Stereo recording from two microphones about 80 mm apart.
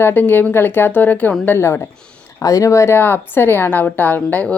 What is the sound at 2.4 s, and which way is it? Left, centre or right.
Speech, left.